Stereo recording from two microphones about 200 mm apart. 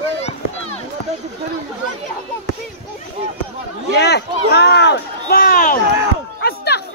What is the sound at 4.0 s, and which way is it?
Speech, 55° left (ahead or behind).